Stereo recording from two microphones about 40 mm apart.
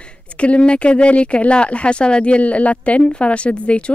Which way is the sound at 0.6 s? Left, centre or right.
Left.